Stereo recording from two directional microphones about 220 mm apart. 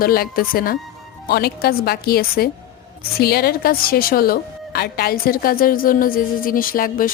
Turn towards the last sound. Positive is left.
turn(degrees=40)  # may be behind; listen again after turning